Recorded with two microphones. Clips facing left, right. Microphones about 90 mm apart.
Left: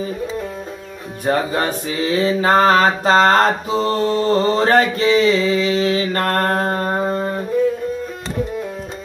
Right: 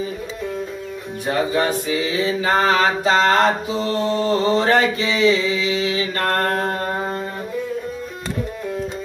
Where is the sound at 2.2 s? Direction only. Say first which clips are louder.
Left 5 dB; 40° left (ahead or behind).